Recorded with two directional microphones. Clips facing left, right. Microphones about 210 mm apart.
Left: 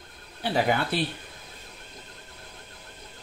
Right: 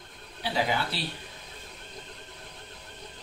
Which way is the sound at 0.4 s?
55° left (ahead or behind).